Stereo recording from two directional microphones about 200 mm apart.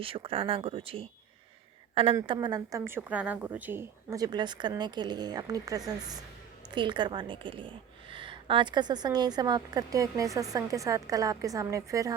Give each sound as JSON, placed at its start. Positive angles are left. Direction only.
{"t": 0.0, "sound": "a woman's voice", "side_deg": -25}
{"t": 2.2, "sound": "a woman's voice", "side_deg": -25}